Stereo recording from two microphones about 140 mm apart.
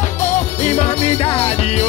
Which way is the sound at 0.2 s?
55° left (ahead or behind).